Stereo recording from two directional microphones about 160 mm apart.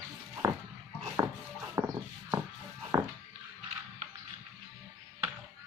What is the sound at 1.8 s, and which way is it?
Music, 15° right (ahead or behind).